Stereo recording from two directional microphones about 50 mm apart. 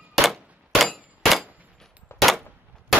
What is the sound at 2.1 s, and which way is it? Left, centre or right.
Gunshot, left.